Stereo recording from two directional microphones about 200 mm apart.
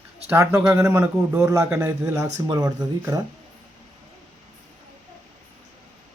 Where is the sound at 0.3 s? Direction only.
10° right (ahead or behind).